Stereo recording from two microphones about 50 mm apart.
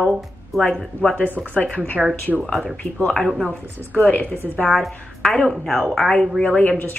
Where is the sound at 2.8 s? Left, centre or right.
Left.